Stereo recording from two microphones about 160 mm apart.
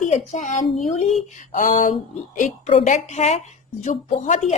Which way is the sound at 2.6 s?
35° left (ahead or behind).